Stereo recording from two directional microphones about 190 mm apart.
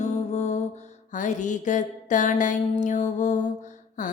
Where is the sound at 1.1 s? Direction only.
40° left (ahead or behind).